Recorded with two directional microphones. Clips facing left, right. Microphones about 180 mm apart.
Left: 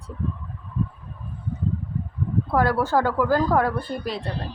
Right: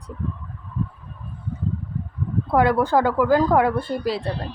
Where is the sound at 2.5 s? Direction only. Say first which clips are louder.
Right 3 dB; 20° right (ahead or behind).